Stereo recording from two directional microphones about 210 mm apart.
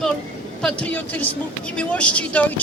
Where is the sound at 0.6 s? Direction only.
5° left (ahead or behind).